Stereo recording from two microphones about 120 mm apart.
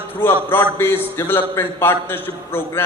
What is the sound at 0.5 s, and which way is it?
A man's voice, 20° left (ahead or behind).